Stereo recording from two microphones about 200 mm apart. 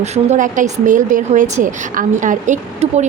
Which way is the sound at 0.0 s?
35° right (ahead or behind).